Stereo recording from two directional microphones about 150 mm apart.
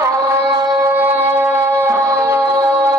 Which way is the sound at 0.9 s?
15° right (ahead or behind).